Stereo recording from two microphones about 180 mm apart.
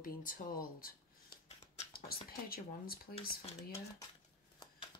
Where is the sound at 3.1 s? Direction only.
35° left (ahead or behind).